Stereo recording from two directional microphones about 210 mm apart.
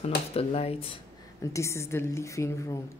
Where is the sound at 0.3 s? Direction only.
30° left (ahead or behind).